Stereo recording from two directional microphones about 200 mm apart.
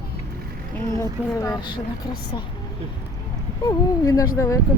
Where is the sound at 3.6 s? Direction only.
15° left (ahead or behind).